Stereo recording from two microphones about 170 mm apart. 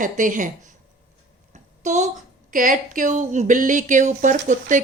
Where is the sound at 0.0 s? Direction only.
50° right (ahead or behind).